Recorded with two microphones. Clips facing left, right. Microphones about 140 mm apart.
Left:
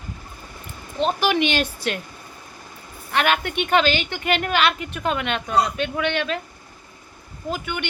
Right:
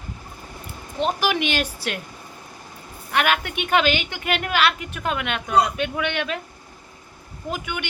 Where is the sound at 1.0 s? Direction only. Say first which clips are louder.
Left 2 dB; 10° right (ahead or behind).